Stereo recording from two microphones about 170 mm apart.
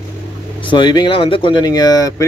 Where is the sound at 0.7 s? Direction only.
25° left (ahead or behind).